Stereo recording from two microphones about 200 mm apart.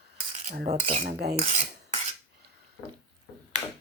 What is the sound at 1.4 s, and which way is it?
Cutlery, 30° right (ahead or behind).